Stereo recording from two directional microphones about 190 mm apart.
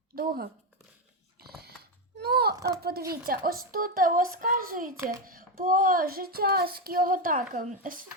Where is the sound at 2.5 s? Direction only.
15° right (ahead or behind).